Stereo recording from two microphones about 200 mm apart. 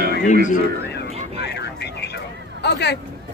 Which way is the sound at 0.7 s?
55° left (ahead or behind).